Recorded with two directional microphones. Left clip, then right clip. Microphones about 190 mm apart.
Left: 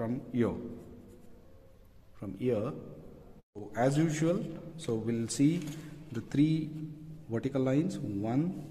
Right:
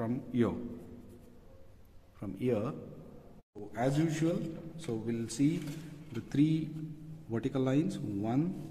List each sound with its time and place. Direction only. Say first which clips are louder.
0.0 s a man's voice: even; centre (ahead or behind)
2.1 s a man's voice: left 1 dB; centre (ahead or behind)
3.7 s a man's voice: left 3 dB; 25° left (ahead or behind)
6.1 s speech: left 1 dB; 10° left (ahead or behind)